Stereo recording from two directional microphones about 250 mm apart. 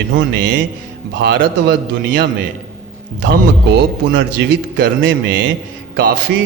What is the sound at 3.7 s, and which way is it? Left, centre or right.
Speech, right.